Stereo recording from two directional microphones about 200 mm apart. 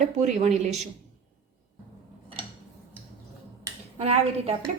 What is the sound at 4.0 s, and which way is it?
Speech, 30° right (ahead or behind).